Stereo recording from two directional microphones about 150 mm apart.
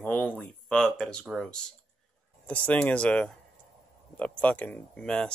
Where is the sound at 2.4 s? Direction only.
10° left (ahead or behind).